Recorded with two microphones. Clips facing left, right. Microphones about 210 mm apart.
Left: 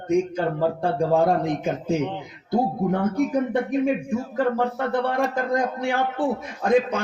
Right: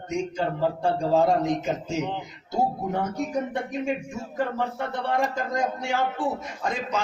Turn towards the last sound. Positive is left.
turn(degrees=55)  # may be behind; listen again after turning